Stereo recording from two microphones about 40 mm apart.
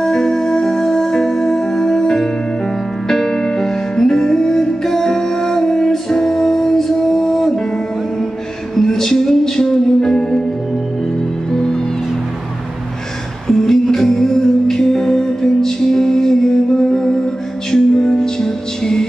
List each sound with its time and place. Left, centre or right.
0.0 s music: centre
7.5 s music: centre
11.5 s music: centre
13.5 s music: centre